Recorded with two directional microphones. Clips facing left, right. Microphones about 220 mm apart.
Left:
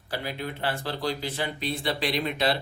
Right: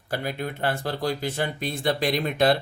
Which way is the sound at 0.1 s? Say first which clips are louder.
Right 3 dB; 50° right (ahead or behind).